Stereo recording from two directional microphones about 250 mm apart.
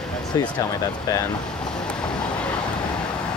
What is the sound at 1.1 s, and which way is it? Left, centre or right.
Speech, centre.